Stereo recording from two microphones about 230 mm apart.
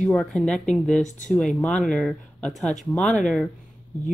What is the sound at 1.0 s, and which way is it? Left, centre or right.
Speech, left.